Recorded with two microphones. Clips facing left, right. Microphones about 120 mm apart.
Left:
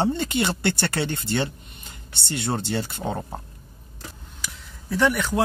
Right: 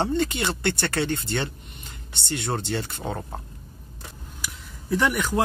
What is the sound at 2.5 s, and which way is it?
Speech, 5° left (ahead or behind).